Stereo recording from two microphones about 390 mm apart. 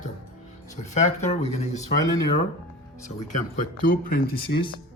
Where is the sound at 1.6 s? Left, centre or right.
Centre.